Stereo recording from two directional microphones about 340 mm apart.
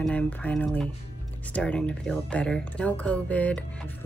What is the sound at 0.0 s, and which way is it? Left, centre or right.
Speech, centre.